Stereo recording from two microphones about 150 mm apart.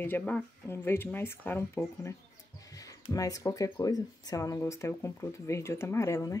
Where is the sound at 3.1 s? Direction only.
25° left (ahead or behind).